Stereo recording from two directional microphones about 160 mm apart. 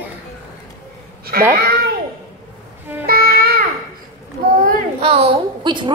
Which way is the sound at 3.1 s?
70° right (ahead or behind).